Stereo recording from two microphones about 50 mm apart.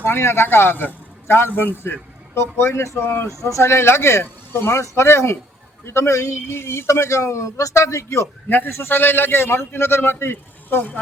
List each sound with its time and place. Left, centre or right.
0.0 s a man's voice: left
2.3 s speech: left
5.9 s speech: left
8.4 s a man's voice: left